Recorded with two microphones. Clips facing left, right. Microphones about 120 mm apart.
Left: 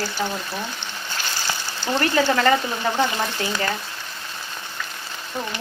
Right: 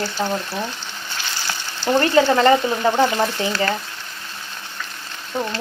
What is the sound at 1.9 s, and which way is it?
Speech, 25° right (ahead or behind).